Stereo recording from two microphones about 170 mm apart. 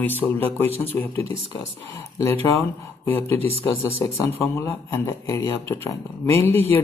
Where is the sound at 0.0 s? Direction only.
10° left (ahead or behind).